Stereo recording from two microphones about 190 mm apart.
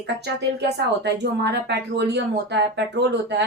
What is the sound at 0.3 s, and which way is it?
Speech, 60° right (ahead or behind).